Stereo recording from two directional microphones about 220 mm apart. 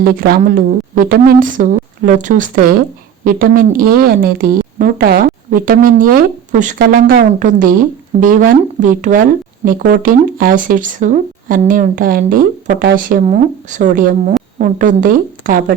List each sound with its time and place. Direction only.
0.3 s speech: 40° right (ahead or behind)
13.0 s speech: 35° right (ahead or behind)